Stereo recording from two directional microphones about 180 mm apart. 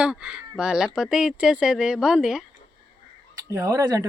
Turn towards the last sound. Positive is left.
turn(degrees=-20)  # may be behind; listen again after turning